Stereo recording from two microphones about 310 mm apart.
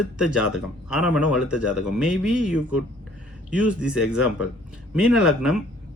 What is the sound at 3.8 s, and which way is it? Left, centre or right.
Speech, centre.